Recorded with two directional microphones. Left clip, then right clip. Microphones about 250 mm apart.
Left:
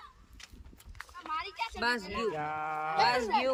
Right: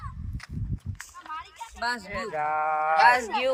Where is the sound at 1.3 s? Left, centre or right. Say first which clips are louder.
Left 4 dB; left.